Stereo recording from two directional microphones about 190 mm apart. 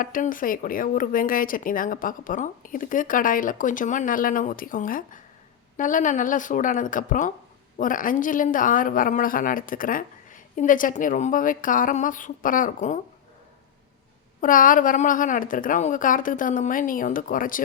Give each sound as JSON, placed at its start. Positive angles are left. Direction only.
{"t": 0.0, "sound": "speech", "side_deg": 45}
{"t": 14.4, "sound": "speech", "side_deg": 45}